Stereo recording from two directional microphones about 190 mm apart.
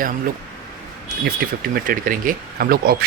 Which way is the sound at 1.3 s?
50° right (ahead or behind).